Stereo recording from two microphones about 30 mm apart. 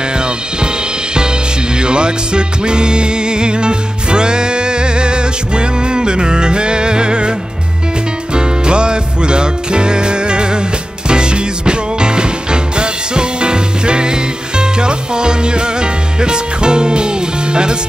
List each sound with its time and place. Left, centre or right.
1.8 s music: right
8.4 s music: right